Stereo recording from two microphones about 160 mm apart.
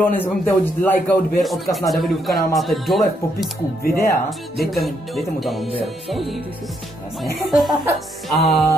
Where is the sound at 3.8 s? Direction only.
70° left (ahead or behind).